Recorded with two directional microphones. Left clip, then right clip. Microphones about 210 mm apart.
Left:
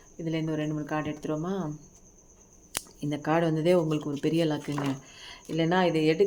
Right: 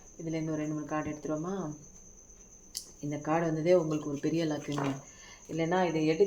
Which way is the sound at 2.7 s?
40° left (ahead or behind).